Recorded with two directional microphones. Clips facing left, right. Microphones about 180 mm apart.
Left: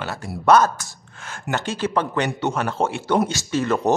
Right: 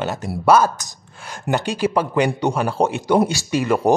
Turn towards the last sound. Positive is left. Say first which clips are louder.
# right 3 dB
turn(degrees=-10)  # may be behind; listen again after turning